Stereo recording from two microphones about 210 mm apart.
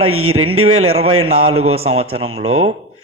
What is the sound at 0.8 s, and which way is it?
A man's voice, 30° right (ahead or behind).